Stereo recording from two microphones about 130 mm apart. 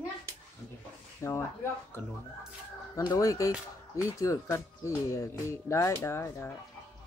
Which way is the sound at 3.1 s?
25° left (ahead or behind).